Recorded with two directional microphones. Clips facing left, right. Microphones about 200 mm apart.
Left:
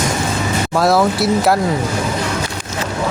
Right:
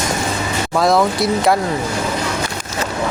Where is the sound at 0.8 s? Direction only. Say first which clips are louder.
Even; 5° left (ahead or behind).